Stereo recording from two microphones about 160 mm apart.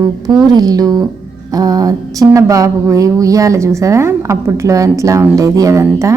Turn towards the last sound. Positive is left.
turn(degrees=-20)  # may be behind; listen again after turning